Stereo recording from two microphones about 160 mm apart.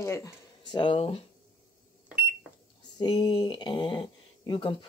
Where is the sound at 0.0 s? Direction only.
20° left (ahead or behind); by 1.2 s 35° left (ahead or behind).